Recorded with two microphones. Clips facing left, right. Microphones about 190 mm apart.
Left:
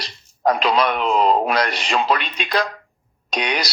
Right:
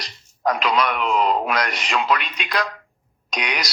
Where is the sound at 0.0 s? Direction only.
30° left (ahead or behind).